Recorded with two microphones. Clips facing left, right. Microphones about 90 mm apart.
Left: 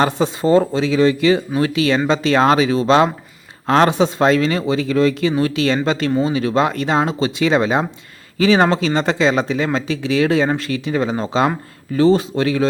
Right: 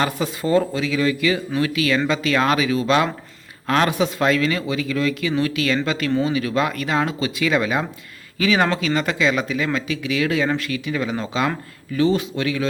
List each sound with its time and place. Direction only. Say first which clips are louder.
0.0 s speech: left 6 dB; 30° left (ahead or behind)